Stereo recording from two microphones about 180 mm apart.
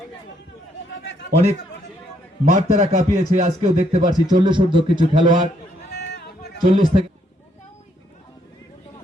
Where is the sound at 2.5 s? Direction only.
45° right (ahead or behind).